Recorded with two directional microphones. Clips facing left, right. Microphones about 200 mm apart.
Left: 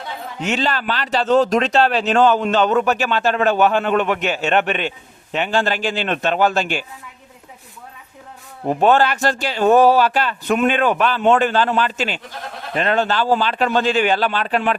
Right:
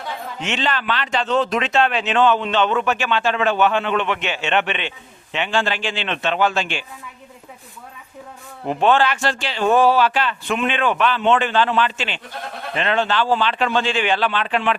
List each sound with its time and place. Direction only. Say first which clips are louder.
0.3 s speech: left 3 dB; 40° left (ahead or behind)
8.8 s speech: left 2 dB; 40° left (ahead or behind)